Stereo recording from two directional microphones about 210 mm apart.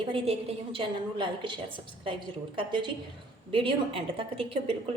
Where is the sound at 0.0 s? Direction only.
25° right (ahead or behind).